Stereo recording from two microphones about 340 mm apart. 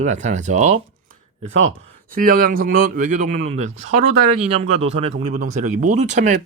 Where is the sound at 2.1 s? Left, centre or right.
Right.